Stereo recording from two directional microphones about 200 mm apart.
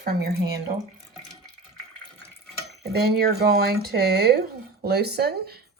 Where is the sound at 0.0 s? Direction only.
50° right (ahead or behind).